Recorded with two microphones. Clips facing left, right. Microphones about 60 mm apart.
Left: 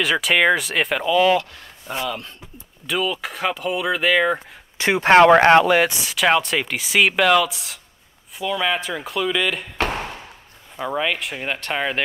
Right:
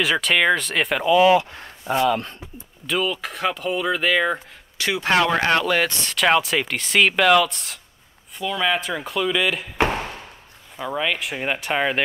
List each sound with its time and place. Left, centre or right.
0.0 s speech: centre
1.1 s speech: centre
1.5 s a sound: right
2.0 s speech: right
2.9 s speech: centre
4.7 s speech: left
5.7 s speech: centre
10.8 s speech: centre